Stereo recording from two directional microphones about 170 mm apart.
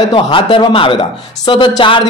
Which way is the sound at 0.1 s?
30° left (ahead or behind).